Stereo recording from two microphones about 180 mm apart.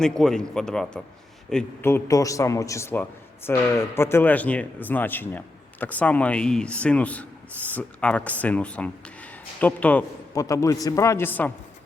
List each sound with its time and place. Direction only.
0.0 s a man's voice: 5° left (ahead or behind)
1.8 s a man's voice: 15° left (ahead or behind)